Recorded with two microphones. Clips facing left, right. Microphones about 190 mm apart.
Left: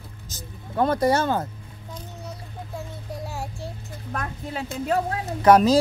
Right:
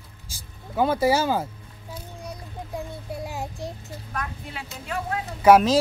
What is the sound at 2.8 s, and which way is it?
Child singing, 15° right (ahead or behind).